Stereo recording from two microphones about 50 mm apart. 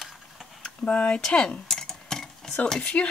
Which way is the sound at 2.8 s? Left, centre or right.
Left.